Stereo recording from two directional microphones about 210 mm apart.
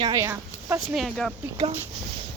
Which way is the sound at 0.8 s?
Centre (ahead or behind).